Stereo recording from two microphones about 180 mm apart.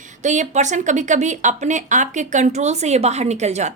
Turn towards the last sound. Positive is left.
turn(degrees=-40)  # may be behind; listen again after turning